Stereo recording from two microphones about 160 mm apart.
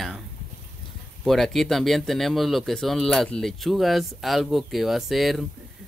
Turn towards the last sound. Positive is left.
turn(degrees=0)  # may be behind; listen again after turning